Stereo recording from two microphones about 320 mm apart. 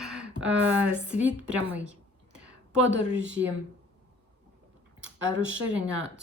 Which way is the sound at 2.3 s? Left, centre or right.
Centre.